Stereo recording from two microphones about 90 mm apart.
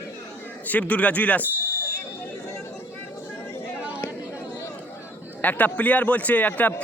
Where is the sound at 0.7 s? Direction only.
15° left (ahead or behind).